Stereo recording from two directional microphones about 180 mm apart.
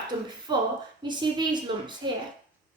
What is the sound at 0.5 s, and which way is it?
A woman's voice, 25° right (ahead or behind).